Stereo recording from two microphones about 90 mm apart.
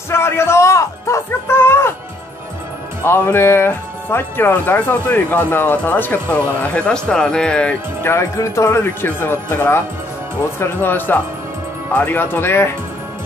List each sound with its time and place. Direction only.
0.1 s music: 30° left (ahead or behind)
3.0 s speech: 25° left (ahead or behind); by 7.7 s 10° left (ahead or behind)
8.0 s speech: 30° left (ahead or behind)